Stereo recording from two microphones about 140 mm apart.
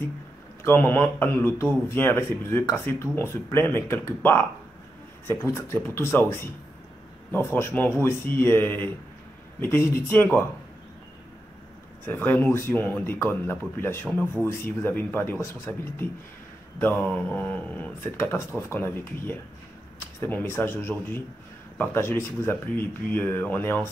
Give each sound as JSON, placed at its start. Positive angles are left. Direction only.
{"t": 0.7, "sound": "speech", "side_deg": 15}
{"t": 12.1, "sound": "speech", "side_deg": 15}